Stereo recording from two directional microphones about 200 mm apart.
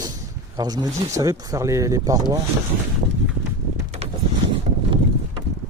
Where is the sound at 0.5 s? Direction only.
20° right (ahead or behind).